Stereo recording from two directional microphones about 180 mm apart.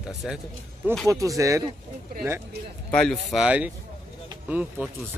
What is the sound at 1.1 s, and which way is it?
Speech, 15° right (ahead or behind).